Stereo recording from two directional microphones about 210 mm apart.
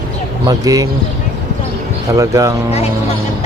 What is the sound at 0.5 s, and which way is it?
Speech, 15° right (ahead or behind).